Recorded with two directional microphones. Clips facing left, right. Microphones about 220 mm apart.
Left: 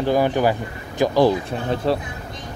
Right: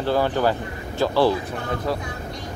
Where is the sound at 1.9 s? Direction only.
25° left (ahead or behind).